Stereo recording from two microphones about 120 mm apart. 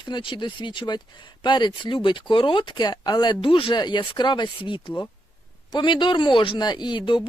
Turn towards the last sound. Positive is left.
turn(degrees=40)  # may be behind; listen again after turning